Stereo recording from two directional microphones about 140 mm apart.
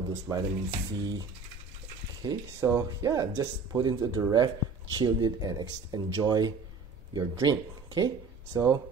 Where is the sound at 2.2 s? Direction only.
25° right (ahead or behind).